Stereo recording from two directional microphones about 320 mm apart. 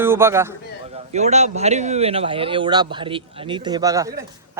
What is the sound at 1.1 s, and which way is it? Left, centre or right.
Speech, right.